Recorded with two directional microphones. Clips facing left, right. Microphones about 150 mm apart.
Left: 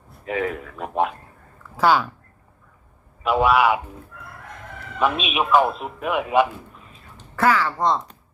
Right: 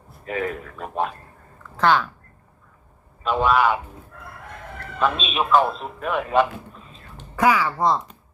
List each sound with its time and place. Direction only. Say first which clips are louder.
0.3 s a man's voice: left 2 dB; centre (ahead or behind)
0.8 s speech: left 4 dB; 15° left (ahead or behind)
3.2 s speech: left 2 dB; 10° left (ahead or behind)
4.9 s speech: left 1 dB; 10° left (ahead or behind)
7.3 s speech: even; 15° right (ahead or behind)